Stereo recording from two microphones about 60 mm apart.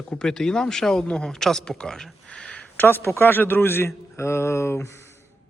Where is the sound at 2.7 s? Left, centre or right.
Left.